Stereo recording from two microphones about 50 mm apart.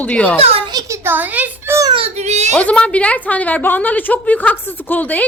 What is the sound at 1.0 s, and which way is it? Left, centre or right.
Speech, right.